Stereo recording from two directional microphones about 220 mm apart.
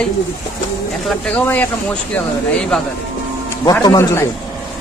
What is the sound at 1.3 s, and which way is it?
Speech, 5° left (ahead or behind).